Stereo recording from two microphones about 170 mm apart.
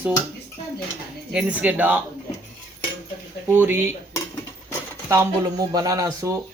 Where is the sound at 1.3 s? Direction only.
5° right (ahead or behind).